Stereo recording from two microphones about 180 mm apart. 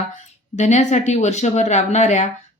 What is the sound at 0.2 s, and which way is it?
A woman's voice, 40° left (ahead or behind).